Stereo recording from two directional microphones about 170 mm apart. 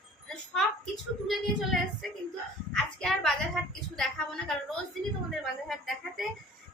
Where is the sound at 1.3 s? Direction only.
Centre (ahead or behind).